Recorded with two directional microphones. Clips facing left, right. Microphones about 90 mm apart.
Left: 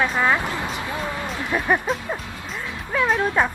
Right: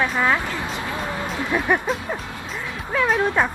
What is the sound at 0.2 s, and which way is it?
Speech, 20° left (ahead or behind).